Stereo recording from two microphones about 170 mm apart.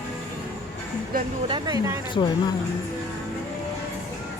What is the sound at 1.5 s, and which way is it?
Speech, 25° right (ahead or behind).